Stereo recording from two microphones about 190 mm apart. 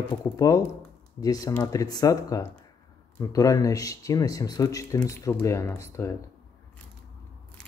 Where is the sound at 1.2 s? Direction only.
20° left (ahead or behind).